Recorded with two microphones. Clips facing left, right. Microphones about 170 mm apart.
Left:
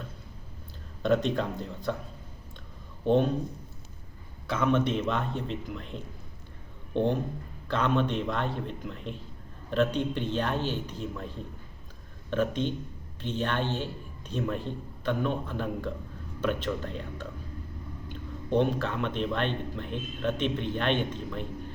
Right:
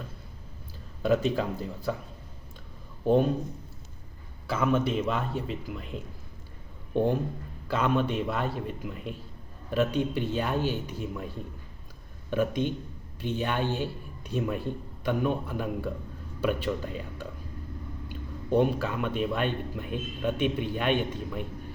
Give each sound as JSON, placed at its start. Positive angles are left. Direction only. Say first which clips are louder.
{"t": 1.0, "sound": "speech", "louder": "right 1 dB", "side_deg": -5}
{"t": 3.1, "sound": "speech", "louder": "right 1 dB", "side_deg": -5}
{"t": 4.4, "sound": "speech", "louder": "even", "side_deg": -5}